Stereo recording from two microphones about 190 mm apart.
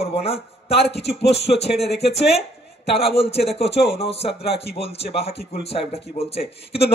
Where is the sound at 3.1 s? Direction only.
30° left (ahead or behind).